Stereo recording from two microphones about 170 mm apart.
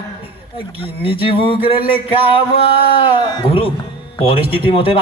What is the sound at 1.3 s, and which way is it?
A man's voice, 30° left (ahead or behind).